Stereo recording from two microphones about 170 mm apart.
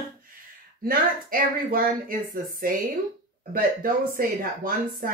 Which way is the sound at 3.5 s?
55° right (ahead or behind).